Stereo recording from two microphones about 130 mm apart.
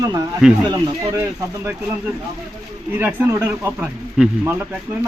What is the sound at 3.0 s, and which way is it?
Speech, 15° right (ahead or behind).